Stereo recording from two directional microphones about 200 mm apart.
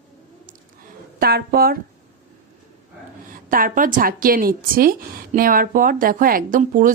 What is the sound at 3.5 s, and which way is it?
A woman's voice, 45° right (ahead or behind).